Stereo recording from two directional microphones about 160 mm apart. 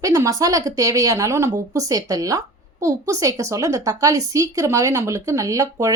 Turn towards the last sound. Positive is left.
turn(degrees=-20)  # may be behind; listen again after turning